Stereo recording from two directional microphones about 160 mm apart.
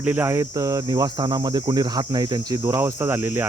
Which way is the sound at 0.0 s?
10° right (ahead or behind).